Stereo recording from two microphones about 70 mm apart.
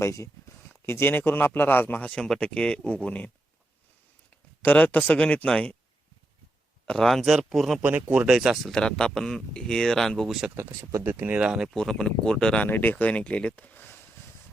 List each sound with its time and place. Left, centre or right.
0.0 s speech: left
0.9 s a man's voice: left
2.1 s speech: centre
4.6 s a man's voice: left
6.8 s speech: centre
7.8 s speech: right
8.3 s speech: centre
8.6 s speech: centre
11.0 s speech: right
11.6 s speech: centre
12.6 s a man's voice: left
13.1 s speech: centre